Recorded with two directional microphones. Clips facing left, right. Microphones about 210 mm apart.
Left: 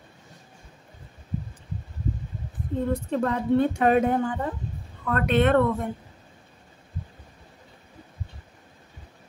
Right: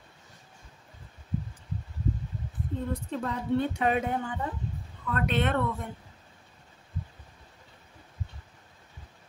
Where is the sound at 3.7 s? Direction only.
45° left (ahead or behind).